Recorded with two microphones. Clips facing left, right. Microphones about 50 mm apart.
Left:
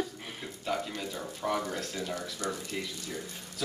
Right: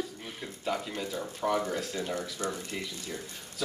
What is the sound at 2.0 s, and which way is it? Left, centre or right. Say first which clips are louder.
Speech: right 2 dB; right.